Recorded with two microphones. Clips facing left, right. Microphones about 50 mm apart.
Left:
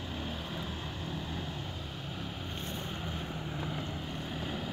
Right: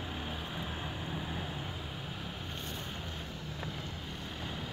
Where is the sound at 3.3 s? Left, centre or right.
Left.